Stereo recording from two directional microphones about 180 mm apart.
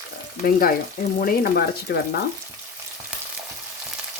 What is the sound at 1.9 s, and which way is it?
Frying, 65° left (ahead or behind).